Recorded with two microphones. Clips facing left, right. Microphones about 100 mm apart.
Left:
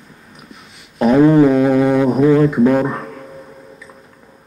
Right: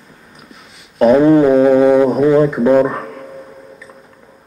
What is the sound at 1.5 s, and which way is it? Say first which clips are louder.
Music: right 4 dB; 25° right (ahead or behind).